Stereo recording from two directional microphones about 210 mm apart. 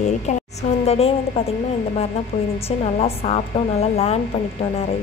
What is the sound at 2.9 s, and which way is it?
Speech, 30° left (ahead or behind).